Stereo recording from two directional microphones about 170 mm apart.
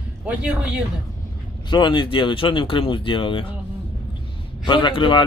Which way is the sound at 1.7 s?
25° left (ahead or behind).